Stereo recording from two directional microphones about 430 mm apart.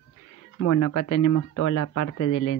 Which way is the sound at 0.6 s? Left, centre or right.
Left.